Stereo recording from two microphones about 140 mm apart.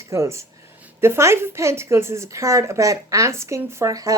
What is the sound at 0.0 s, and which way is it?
A woman's voice, 20° right (ahead or behind).